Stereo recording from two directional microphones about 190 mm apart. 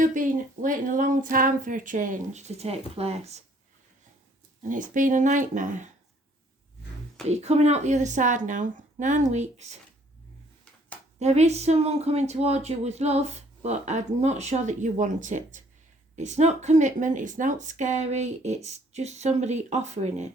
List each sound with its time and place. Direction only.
0.0 s speech: 45° right (ahead or behind)
4.7 s speech: 45° right (ahead or behind)
7.3 s speech: 35° right (ahead or behind)
11.2 s speech: 35° right (ahead or behind)